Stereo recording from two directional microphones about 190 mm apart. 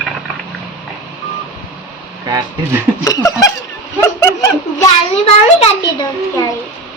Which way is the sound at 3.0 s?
15° left (ahead or behind).